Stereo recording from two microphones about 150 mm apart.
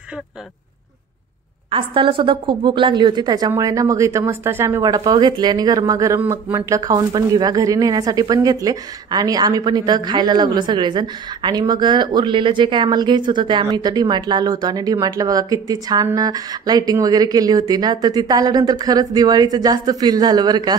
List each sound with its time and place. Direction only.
1.7 s a woman's voice: 35° right (ahead or behind)